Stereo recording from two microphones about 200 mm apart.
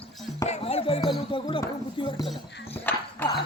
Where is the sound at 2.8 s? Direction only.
10° left (ahead or behind).